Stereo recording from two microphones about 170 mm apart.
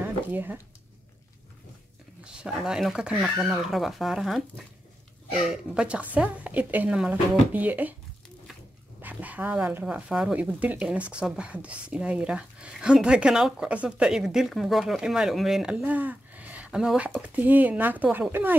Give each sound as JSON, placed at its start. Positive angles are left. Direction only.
{"t": 0.0, "sound": "a sound", "side_deg": -10}
{"t": 2.2, "sound": "a woman's voice", "side_deg": -5}
{"t": 9.0, "sound": "a woman's voice", "side_deg": -10}